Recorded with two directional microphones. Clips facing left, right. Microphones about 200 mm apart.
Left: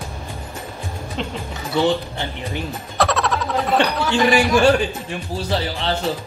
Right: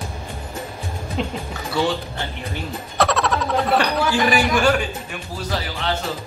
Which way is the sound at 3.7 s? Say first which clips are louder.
Left 3 dB; 25° left (ahead or behind).